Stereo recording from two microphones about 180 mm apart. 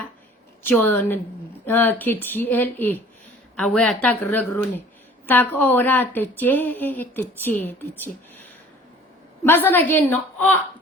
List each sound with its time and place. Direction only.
0.6 s a woman's voice: 10° left (ahead or behind)